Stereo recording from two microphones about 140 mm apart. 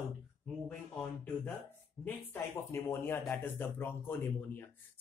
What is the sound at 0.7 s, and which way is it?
Speech, 10° left (ahead or behind).